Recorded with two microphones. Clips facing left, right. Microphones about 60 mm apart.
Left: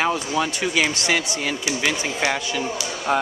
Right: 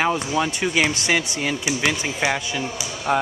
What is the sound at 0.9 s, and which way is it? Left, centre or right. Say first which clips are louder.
Speech: even; right.